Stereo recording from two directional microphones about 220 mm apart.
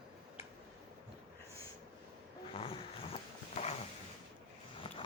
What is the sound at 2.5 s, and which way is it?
Roaring cats, 25° left (ahead or behind).